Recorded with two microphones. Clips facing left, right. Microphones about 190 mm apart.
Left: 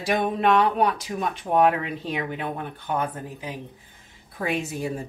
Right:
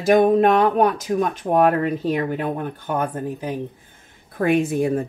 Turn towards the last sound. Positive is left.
turn(degrees=-55)  # may be behind; listen again after turning